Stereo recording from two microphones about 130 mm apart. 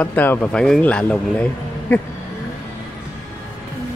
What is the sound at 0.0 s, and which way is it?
A man's voice, 15° left (ahead or behind).